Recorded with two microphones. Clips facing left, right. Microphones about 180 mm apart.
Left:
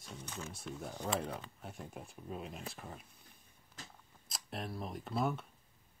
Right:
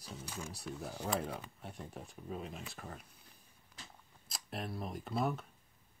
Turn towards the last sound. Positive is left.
turn(degrees=0)  # may be behind; listen again after turning